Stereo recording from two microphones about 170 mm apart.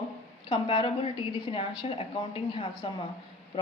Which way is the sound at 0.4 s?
30° left (ahead or behind).